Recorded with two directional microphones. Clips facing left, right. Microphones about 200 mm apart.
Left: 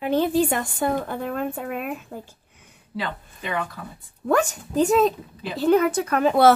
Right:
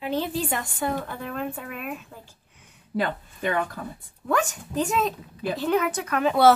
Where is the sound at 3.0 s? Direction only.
50° right (ahead or behind).